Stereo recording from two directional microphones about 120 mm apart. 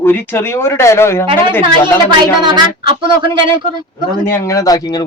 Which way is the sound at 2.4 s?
40° right (ahead or behind).